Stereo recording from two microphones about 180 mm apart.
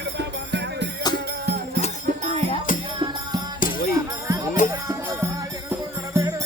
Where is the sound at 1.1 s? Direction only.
60° right (ahead or behind).